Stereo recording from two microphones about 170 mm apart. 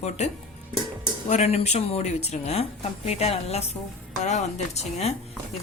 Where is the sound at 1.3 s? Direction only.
40° left (ahead or behind).